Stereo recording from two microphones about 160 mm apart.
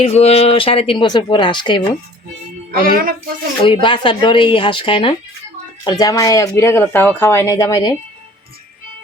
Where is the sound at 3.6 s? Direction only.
30° left (ahead or behind).